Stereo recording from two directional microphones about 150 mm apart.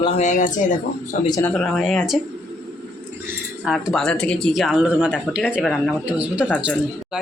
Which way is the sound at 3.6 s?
Centre (ahead or behind).